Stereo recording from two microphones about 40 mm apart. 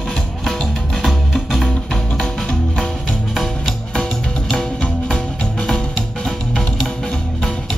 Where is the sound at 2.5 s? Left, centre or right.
Centre.